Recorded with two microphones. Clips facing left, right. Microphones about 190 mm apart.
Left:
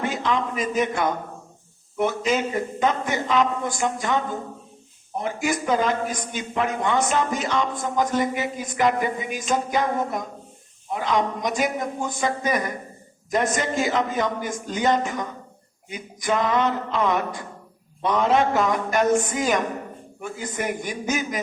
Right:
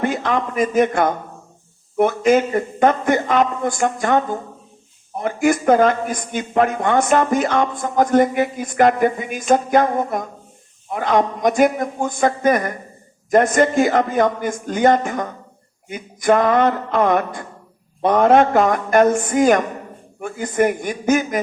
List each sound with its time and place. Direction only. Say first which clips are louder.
0.0 s speech: right 4 dB; 55° right (ahead or behind)
5.2 s speech: right 9 dB; 55° right (ahead or behind)